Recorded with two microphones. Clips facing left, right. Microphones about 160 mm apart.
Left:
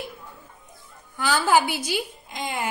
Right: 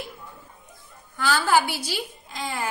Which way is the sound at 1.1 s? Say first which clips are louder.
Left 1 dB; 15° left (ahead or behind).